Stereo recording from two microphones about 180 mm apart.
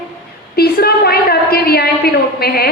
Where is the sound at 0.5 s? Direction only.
60° left (ahead or behind).